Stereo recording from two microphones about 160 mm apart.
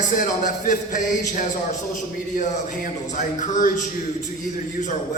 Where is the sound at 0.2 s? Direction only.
55° left (ahead or behind).